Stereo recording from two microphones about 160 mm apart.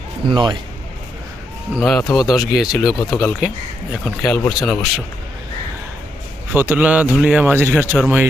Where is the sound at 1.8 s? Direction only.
5° left (ahead or behind).